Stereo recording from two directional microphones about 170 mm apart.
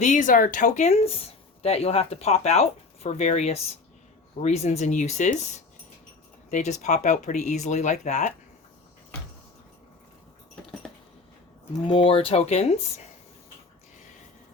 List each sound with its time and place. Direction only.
0.0 s speech: 50° left (ahead or behind)
11.9 s speech: 30° left (ahead or behind)